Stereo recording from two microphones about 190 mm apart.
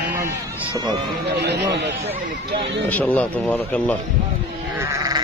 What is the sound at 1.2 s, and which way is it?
Speech, 60° right (ahead or behind).